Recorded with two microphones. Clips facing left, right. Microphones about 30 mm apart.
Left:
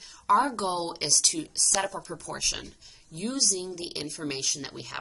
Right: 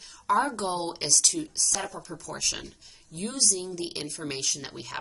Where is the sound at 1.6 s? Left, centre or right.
Left.